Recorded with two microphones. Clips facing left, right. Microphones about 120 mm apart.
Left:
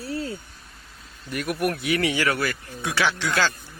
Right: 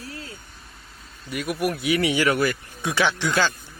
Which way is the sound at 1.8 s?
15° right (ahead or behind).